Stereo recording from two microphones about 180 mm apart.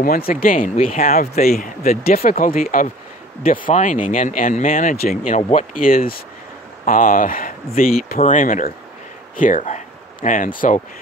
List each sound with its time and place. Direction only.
0.0 s speech: 55° left (ahead or behind)